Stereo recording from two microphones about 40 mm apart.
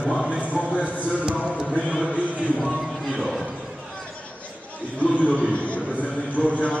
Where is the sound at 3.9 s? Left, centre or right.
Left.